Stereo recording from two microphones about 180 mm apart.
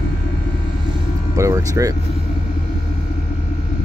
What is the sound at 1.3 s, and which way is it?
Music, 20° right (ahead or behind).